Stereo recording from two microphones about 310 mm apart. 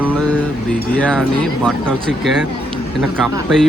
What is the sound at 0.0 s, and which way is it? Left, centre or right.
Speech, centre.